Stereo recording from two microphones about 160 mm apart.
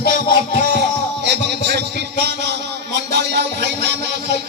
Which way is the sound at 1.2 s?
90° right.